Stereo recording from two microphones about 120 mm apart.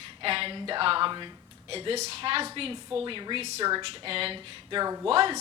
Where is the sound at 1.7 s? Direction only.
55° right (ahead or behind).